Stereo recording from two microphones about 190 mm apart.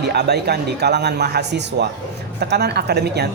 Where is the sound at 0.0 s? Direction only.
60° right (ahead or behind).